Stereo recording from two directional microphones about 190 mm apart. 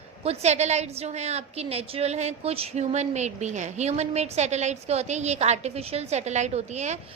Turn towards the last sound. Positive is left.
turn(degrees=-35)  # may be behind; listen again after turning